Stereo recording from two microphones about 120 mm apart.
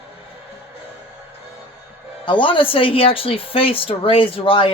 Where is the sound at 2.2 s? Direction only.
40° left (ahead or behind).